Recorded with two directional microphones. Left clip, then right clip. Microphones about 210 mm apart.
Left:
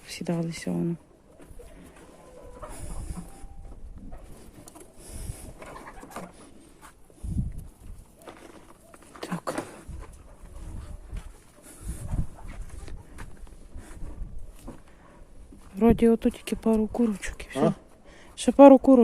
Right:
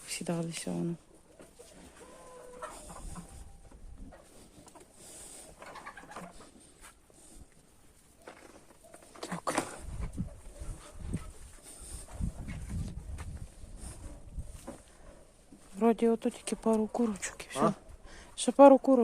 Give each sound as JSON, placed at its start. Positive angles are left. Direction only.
{"t": 0.1, "sound": "speech", "side_deg": 5}
{"t": 5.0, "sound": "vehicle", "side_deg": 15}
{"t": 5.5, "sound": "bird", "side_deg": 50}
{"t": 9.2, "sound": "a sound", "side_deg": 10}
{"t": 14.7, "sound": "a sound", "side_deg": -50}
{"t": 15.8, "sound": "speech", "side_deg": 15}
{"t": 18.3, "sound": "speech", "side_deg": 15}